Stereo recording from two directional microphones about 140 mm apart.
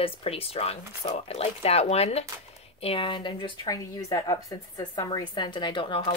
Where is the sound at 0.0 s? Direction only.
45° left (ahead or behind).